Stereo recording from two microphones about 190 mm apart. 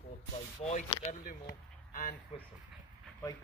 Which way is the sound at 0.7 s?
35° left (ahead or behind).